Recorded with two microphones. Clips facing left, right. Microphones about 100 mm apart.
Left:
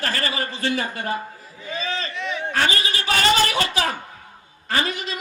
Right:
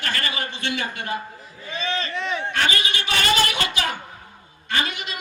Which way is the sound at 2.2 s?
35° right (ahead or behind).